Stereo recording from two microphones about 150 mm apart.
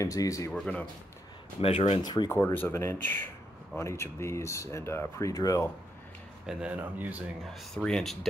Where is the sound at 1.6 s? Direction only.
40° left (ahead or behind).